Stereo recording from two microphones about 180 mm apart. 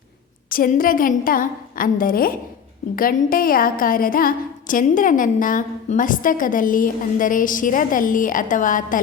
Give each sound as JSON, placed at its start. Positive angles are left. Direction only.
{"t": 0.5, "sound": "a woman's voice", "side_deg": 50}